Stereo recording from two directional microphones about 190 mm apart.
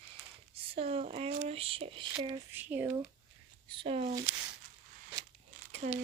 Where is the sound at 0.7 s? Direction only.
30° right (ahead or behind).